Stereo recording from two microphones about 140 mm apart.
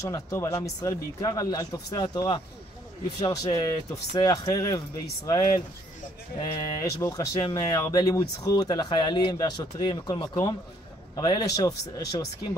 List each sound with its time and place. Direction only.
0.0 s speech: 25° left (ahead or behind)
7.3 s speech: 40° left (ahead or behind)
7.6 s speech: 25° left (ahead or behind)